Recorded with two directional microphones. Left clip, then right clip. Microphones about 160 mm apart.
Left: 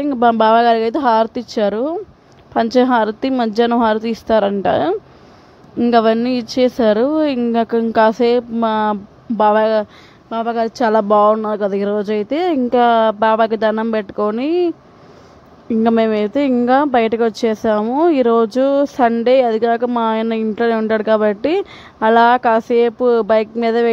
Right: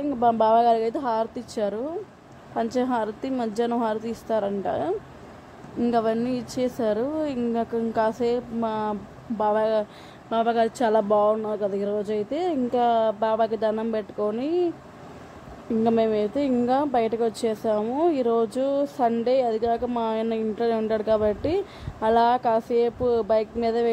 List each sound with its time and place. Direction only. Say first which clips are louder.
0.0 s speech: left 8 dB; 45° left (ahead or behind)
10.3 s speech: left 3 dB; 25° left (ahead or behind)
10.9 s speech: left 10 dB; 45° left (ahead or behind)
15.8 s speech: left 7 dB; 40° left (ahead or behind)